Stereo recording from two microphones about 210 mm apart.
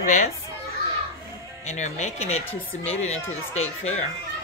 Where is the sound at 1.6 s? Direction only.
35° left (ahead or behind).